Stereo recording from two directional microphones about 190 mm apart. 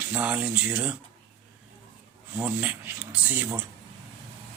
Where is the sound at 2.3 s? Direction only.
10° right (ahead or behind).